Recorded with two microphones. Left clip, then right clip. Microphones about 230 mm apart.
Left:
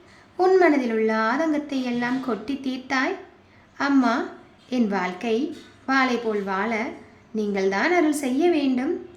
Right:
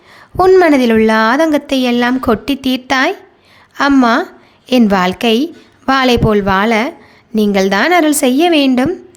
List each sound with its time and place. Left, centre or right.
0.3 s a woman's voice: right